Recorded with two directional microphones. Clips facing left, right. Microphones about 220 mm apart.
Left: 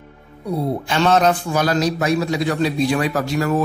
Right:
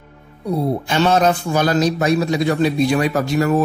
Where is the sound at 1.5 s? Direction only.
25° right (ahead or behind).